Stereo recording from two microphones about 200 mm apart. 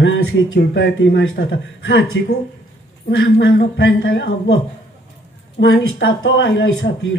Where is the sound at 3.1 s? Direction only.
65° left (ahead or behind).